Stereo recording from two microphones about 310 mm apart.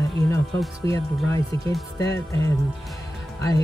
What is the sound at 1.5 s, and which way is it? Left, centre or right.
Speech, centre.